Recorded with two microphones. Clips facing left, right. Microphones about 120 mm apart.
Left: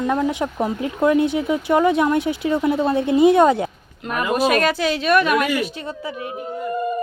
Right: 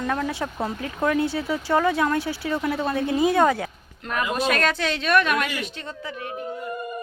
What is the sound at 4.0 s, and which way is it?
Speech, 10° left (ahead or behind).